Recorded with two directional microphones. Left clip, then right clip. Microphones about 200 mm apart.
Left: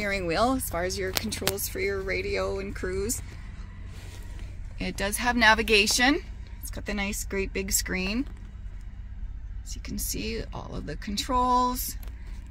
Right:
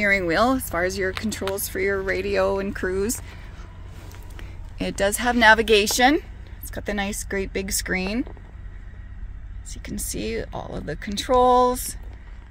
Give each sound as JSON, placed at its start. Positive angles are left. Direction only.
{"t": 0.0, "sound": "speech", "side_deg": -35}
{"t": 4.7, "sound": "speech", "side_deg": -35}
{"t": 9.8, "sound": "speech", "side_deg": -30}